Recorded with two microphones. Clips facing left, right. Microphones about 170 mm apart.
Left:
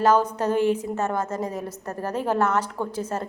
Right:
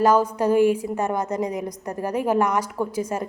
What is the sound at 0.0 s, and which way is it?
A woman's voice, 10° right (ahead or behind).